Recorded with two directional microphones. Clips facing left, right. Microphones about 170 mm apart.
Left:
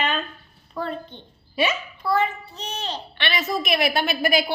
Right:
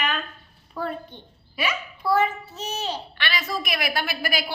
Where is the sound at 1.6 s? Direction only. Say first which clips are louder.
Left 5 dB; 25° left (ahead or behind).